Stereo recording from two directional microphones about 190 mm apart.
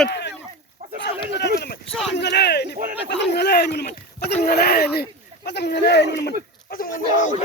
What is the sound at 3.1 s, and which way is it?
Speech, 60° left (ahead or behind).